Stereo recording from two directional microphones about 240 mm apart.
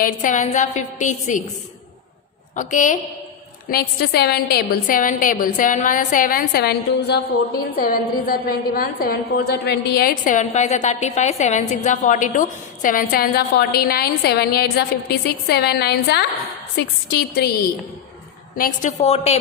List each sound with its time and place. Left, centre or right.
0.0 s a woman's voice: left
2.6 s a woman's voice: left
18.5 s a woman's voice: left